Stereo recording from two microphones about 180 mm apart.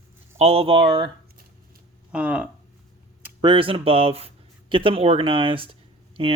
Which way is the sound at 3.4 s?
30° right (ahead or behind).